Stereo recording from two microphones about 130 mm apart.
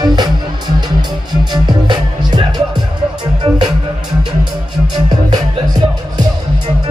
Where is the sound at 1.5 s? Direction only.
35° right (ahead or behind).